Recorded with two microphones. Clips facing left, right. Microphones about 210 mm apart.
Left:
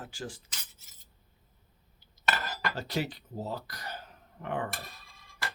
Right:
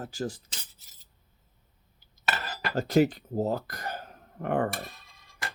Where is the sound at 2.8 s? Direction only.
45° right (ahead or behind).